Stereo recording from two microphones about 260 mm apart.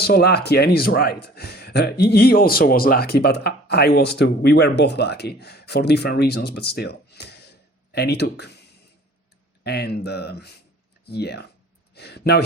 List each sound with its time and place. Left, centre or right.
0.0 s speech: left
9.6 s speech: left